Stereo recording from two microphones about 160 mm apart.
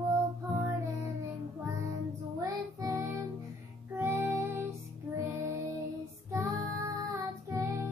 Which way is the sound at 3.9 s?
15° right (ahead or behind).